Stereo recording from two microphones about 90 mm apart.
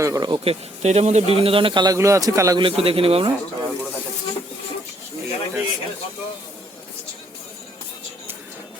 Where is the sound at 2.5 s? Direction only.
80° right.